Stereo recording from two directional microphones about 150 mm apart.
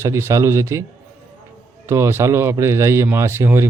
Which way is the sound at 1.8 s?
15° right (ahead or behind).